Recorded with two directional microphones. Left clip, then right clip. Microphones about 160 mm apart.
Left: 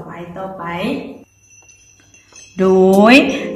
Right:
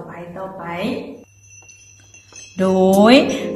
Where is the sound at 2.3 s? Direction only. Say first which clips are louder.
Left 5 dB; centre (ahead or behind).